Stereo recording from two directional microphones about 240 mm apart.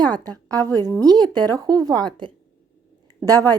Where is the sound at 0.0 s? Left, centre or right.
Centre.